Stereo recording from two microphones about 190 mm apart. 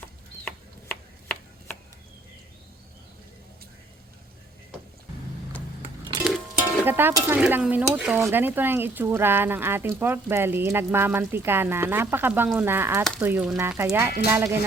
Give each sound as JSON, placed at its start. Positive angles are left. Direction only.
{"t": 0.4, "sound": "chopping", "side_deg": 5}
{"t": 6.2, "sound": "music", "side_deg": 0}
{"t": 6.8, "sound": "speech", "side_deg": -10}